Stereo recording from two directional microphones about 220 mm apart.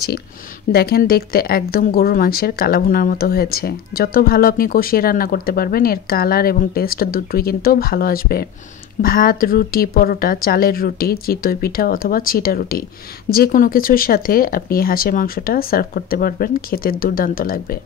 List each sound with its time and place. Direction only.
0.7 s speech: 45° left (ahead or behind)